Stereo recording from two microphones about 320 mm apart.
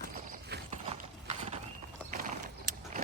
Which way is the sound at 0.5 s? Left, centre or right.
Right.